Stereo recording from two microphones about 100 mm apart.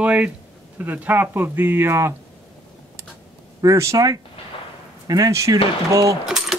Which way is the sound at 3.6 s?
30° right (ahead or behind).